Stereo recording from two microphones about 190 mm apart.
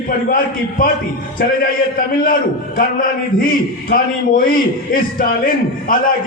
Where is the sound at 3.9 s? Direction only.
45° left (ahead or behind).